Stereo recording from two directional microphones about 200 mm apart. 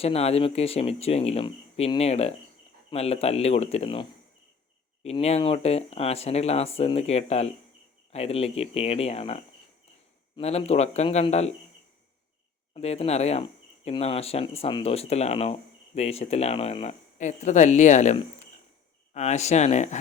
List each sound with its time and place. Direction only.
0.0 s speech: 30° left (ahead or behind)
5.0 s speech: 30° left (ahead or behind)
12.7 s speech: 30° left (ahead or behind)